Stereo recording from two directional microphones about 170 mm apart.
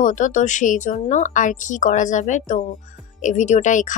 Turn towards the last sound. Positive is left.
turn(degrees=50)  # may be behind; listen again after turning